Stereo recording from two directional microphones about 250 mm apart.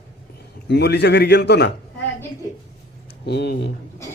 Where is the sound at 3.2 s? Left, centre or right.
Left.